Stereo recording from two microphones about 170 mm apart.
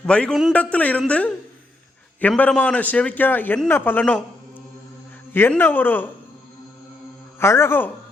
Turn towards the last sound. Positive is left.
turn(degrees=15)  # may be behind; listen again after turning